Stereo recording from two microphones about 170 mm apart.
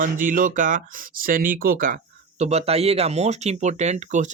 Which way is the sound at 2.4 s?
40° right (ahead or behind).